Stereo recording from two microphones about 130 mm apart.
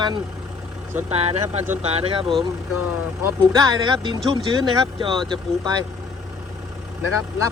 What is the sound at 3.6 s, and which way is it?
Speech, 35° right (ahead or behind).